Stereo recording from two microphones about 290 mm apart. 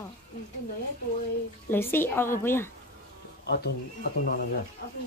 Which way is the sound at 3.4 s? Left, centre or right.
Left.